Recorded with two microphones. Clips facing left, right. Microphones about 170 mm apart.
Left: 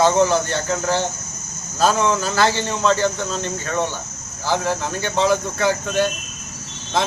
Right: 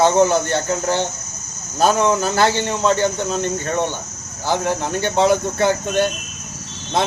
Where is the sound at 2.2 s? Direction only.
50° right (ahead or behind).